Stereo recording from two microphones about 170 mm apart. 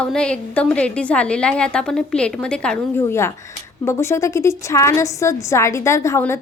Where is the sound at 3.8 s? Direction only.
15° left (ahead or behind).